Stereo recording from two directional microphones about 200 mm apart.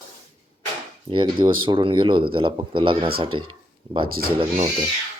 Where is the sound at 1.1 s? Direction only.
25° right (ahead or behind).